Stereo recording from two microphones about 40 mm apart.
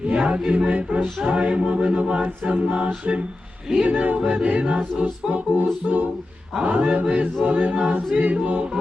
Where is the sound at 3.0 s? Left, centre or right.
Right.